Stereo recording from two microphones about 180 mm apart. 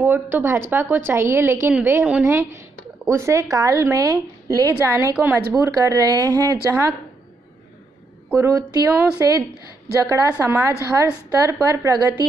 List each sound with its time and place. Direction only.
0.0 s a woman's voice: 10° right (ahead or behind)
8.3 s a woman's voice: 15° right (ahead or behind)